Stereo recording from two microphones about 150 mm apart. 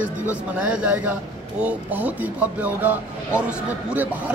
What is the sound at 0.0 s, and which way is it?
Speech, 10° right (ahead or behind).